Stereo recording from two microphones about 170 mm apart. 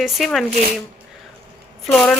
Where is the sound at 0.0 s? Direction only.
Centre (ahead or behind).